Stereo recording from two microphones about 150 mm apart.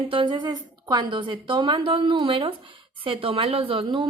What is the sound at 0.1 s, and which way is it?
A woman's voice, 35° right (ahead or behind).